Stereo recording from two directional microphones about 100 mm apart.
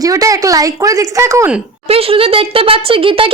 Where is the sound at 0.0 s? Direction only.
35° right (ahead or behind).